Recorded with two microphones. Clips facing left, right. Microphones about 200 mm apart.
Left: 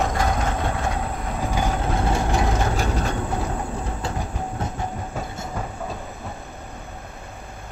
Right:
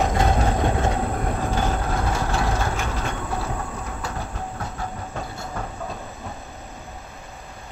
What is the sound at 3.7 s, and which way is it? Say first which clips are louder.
Train: left 3 dB; 30° left (ahead or behind).